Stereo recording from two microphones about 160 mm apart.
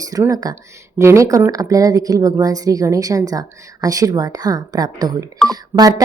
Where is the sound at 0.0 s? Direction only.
20° right (ahead or behind).